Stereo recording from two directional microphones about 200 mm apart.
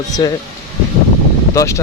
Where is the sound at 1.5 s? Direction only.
15° left (ahead or behind).